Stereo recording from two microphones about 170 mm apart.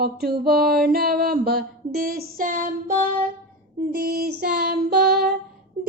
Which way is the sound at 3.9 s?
65° right (ahead or behind).